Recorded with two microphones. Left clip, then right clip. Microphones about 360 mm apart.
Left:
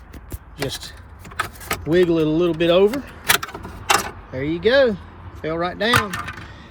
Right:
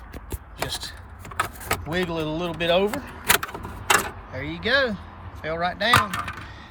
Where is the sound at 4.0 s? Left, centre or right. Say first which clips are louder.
Left 3 dB; centre.